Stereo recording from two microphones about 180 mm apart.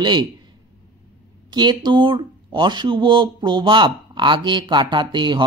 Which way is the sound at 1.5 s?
25° right (ahead or behind).